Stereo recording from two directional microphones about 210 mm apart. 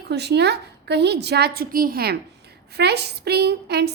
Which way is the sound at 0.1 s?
55° right (ahead or behind).